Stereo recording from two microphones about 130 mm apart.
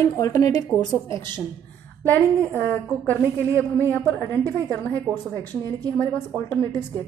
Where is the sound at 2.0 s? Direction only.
15° left (ahead or behind).